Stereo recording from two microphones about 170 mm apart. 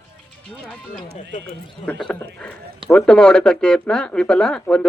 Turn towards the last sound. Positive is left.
turn(degrees=5)  # may be behind; listen again after turning